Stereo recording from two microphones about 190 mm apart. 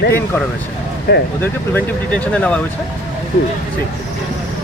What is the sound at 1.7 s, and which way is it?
Speech, 5° left (ahead or behind).